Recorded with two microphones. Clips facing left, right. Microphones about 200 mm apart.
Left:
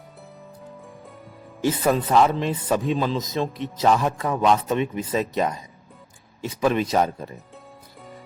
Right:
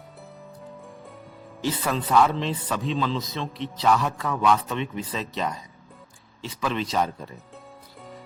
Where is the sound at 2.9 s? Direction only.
10° left (ahead or behind).